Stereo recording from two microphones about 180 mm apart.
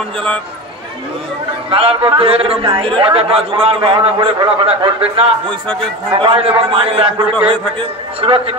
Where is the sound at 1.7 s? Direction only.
30° right (ahead or behind).